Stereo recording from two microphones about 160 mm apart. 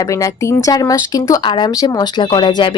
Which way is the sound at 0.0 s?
20° left (ahead or behind).